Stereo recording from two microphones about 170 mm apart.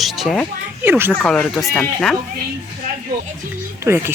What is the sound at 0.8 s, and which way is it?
Speech, 10° right (ahead or behind).